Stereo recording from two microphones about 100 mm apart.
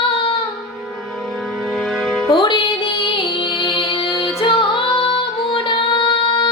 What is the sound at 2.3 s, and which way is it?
Music, 60° left (ahead or behind).